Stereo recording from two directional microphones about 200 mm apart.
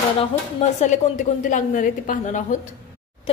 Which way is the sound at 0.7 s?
35° left (ahead or behind).